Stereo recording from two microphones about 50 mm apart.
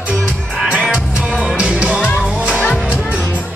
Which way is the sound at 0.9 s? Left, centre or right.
Centre.